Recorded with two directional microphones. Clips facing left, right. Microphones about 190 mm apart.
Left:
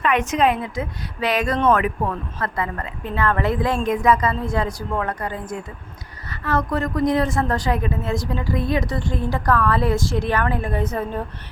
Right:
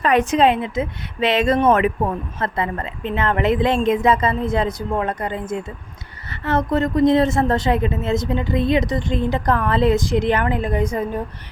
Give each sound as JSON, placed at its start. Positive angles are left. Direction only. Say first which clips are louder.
{"t": 0.0, "sound": "a woman's voice", "louder": "right 3 dB", "side_deg": -35}